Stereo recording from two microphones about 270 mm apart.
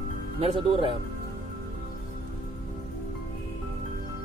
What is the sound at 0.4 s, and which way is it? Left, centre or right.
Speech, right.